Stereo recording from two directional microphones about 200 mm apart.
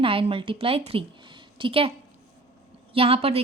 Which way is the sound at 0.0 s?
25° right (ahead or behind).